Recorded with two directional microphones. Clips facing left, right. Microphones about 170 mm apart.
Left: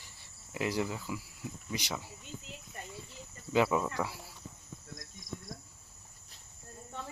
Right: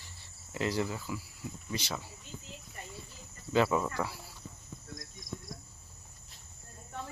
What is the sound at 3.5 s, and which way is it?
Cricket, 15° left (ahead or behind).